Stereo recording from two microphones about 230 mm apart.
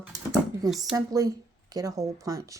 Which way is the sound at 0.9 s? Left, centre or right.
Centre.